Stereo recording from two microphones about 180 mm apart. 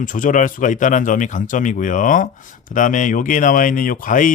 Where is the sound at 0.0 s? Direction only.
45° left (ahead or behind).